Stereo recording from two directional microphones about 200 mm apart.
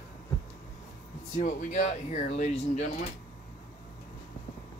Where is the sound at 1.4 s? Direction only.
35° left (ahead or behind).